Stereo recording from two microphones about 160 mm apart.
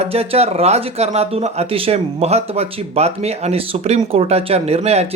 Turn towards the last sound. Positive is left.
turn(degrees=-40)  # may be behind; listen again after turning